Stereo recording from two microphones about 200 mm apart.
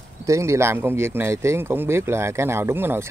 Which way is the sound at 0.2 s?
15° right (ahead or behind).